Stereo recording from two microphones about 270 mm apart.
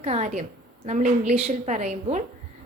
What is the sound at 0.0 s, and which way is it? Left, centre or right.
A woman's voice, right.